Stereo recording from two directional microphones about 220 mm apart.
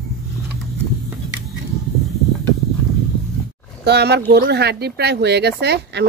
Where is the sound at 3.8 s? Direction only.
50° right (ahead or behind).